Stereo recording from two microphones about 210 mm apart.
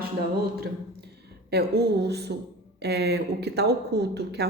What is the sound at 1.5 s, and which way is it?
A woman's voice, 50° right (ahead or behind).